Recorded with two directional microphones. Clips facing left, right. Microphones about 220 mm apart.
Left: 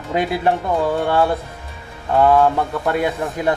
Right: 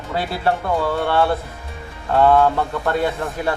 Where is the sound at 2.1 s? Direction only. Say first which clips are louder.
Left 1 dB; 15° left (ahead or behind).